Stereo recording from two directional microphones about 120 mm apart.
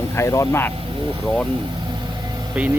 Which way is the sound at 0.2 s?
20° left (ahead or behind).